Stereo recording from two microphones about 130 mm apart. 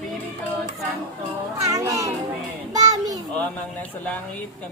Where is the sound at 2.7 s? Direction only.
30° right (ahead or behind).